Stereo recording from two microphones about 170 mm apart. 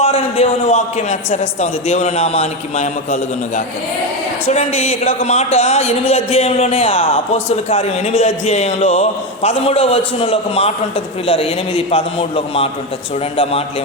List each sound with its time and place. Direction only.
0.0 s speech: 35° left (ahead or behind)
13.3 s speech: 35° left (ahead or behind)